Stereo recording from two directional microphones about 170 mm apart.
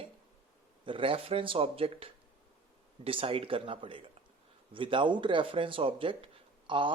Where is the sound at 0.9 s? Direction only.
30° right (ahead or behind).